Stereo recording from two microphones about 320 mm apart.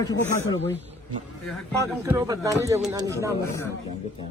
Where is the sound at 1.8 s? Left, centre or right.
Centre.